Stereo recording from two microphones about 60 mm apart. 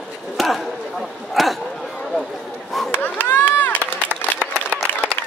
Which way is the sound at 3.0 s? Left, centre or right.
Left.